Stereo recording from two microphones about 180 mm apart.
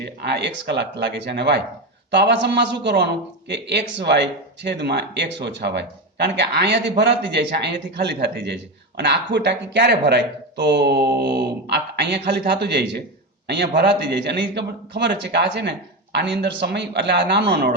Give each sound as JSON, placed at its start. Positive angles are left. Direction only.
{"t": 0.0, "sound": "a man's voice", "side_deg": -70}